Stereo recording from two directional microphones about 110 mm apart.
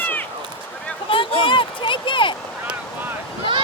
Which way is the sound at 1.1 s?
50° left (ahead or behind).